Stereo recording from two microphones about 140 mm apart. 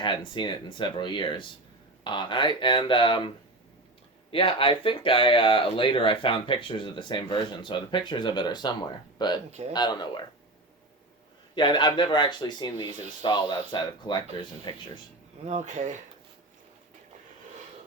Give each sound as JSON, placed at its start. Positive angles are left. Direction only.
{"t": 0.0, "sound": "speech", "side_deg": 35}
{"t": 9.5, "sound": "speech", "side_deg": -55}
{"t": 9.7, "sound": "speech", "side_deg": 30}
{"t": 11.5, "sound": "speech", "side_deg": 35}
{"t": 15.4, "sound": "speech", "side_deg": -55}